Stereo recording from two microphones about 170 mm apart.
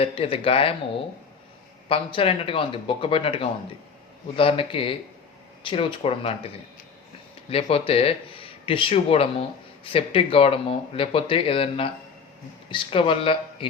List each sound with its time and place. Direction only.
0.0 s speech: 35° left (ahead or behind)
1.9 s speech: 30° left (ahead or behind)
7.5 s speech: 35° left (ahead or behind)